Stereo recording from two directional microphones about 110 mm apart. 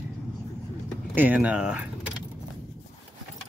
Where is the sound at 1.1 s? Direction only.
15° right (ahead or behind).